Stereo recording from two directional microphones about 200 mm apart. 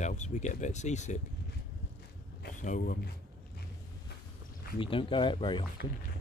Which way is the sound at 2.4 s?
40° left (ahead or behind).